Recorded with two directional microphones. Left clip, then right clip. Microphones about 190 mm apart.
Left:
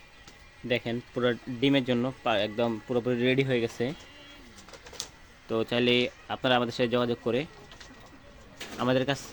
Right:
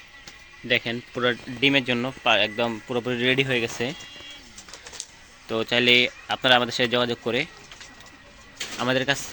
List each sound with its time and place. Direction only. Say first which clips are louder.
0.7 s speech: right 6 dB; 5° left (ahead or behind)
5.5 s speech: right 6 dB; centre (ahead or behind)
8.8 s speech: right 4 dB; 5° left (ahead or behind)